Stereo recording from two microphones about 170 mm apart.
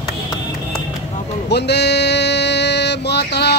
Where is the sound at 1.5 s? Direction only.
80° left.